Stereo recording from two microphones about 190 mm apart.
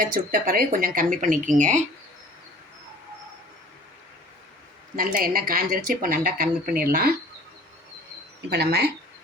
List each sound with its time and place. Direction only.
0.0 s speech: 45° right (ahead or behind)
4.9 s speech: 50° right (ahead or behind)
8.4 s speech: 60° right (ahead or behind)